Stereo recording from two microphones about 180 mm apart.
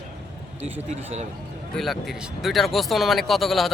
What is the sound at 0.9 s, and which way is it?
Speech, 40° right (ahead or behind).